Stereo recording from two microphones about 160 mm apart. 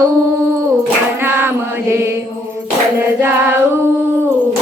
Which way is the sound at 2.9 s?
15° right (ahead or behind).